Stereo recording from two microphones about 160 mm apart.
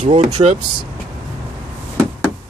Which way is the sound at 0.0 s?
45° right (ahead or behind).